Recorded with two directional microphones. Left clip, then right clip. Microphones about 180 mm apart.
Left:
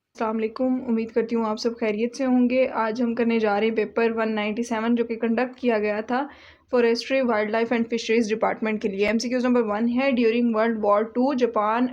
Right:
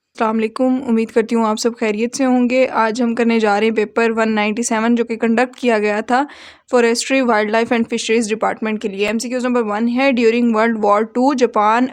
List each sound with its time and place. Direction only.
0.2 s speech: 45° right (ahead or behind)